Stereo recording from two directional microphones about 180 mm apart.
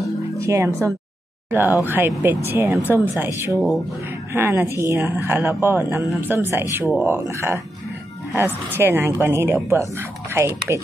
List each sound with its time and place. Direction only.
0.4 s a woman's voice: 15° right (ahead or behind)